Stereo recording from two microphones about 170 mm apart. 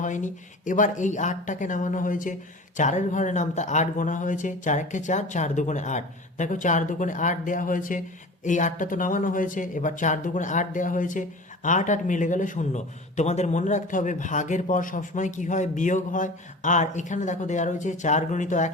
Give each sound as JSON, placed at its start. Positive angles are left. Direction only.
{"t": 0.0, "sound": "speech", "side_deg": 50}